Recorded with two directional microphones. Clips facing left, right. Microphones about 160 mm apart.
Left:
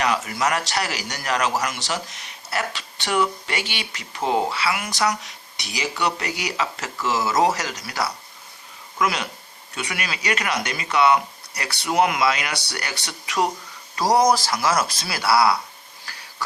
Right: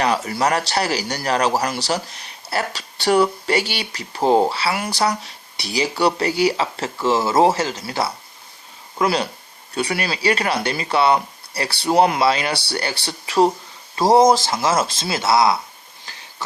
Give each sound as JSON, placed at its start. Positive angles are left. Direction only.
{"t": 0.0, "sound": "a man's voice", "side_deg": -35}
{"t": 16.1, "sound": "wheeze", "side_deg": -20}